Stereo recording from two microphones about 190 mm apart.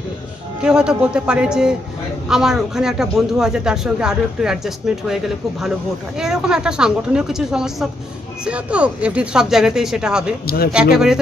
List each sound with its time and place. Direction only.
0.6 s speech: 5° right (ahead or behind)
10.4 s speech: 50° left (ahead or behind)
10.7 s speech: 5° right (ahead or behind)